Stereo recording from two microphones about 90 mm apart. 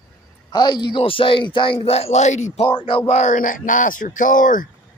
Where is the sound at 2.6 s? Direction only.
85° left.